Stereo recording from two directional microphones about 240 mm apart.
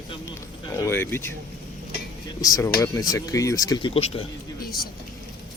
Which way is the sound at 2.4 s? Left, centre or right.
Centre.